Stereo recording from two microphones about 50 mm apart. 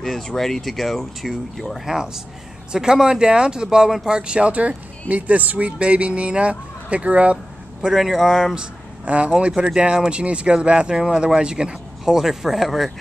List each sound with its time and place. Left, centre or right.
0.0 s speech: centre
1.9 s speech: centre; by 7.3 s right
7.8 s speech: centre
9.0 s speech: right; by 12.9 s centre